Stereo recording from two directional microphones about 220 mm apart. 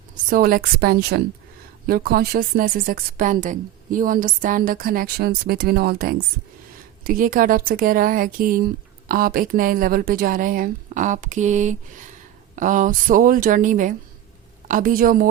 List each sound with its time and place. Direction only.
0.3 s a woman's voice: 40° right (ahead or behind)